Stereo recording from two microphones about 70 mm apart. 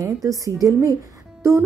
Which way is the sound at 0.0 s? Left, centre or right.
Right.